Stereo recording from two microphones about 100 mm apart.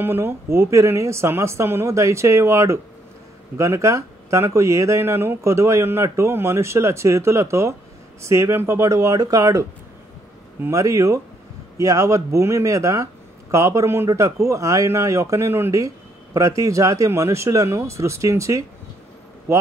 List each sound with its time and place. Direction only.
0.0 s speech: 25° right (ahead or behind)
10.7 s speech: 30° right (ahead or behind)